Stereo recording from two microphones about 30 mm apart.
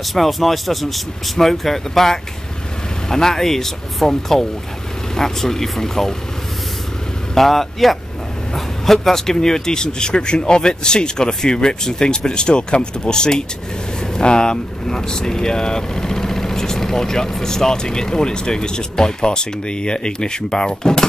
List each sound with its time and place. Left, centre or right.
0.1 s speech: centre
7.3 s speech: centre